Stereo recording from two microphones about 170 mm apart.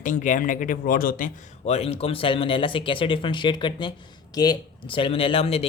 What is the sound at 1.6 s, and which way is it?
Speech, 35° left (ahead or behind).